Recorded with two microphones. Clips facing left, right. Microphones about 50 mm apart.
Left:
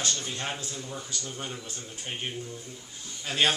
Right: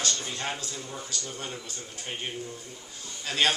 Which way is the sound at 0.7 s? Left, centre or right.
Centre.